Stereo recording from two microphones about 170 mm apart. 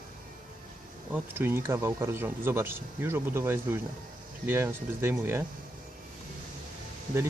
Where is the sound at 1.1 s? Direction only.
10° right (ahead or behind).